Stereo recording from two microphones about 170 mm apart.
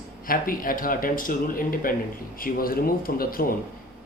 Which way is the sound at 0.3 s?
55° left (ahead or behind).